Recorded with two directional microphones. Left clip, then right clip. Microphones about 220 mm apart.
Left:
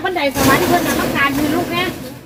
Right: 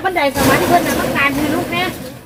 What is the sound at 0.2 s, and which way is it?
Speech, 5° right (ahead or behind).